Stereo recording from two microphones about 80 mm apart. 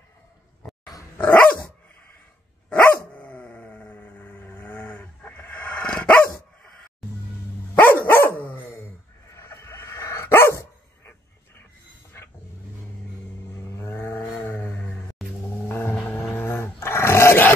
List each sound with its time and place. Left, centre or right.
1.1 s dog: centre
2.7 s dog: left
9.3 s dog: left
13.7 s livestock: left
14.3 s a sound: left
16.3 s dog: left